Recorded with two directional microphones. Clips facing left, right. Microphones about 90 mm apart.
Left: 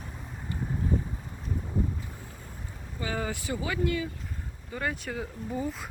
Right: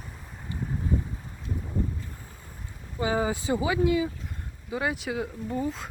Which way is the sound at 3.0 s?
20° right (ahead or behind).